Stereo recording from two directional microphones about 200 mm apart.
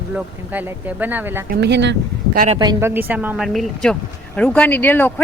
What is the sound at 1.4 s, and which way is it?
Speech, 60° right (ahead or behind).